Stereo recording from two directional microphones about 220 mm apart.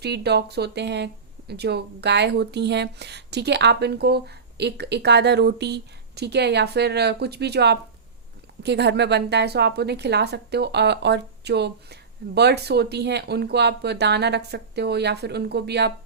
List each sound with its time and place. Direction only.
0.0 s speech: 50° right (ahead or behind)